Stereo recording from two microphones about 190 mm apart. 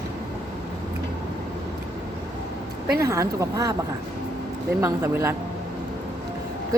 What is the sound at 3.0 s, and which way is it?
Speech, 15° right (ahead or behind).